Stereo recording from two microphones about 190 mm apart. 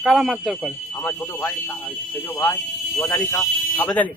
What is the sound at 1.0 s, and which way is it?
A man's voice, 10° left (ahead or behind).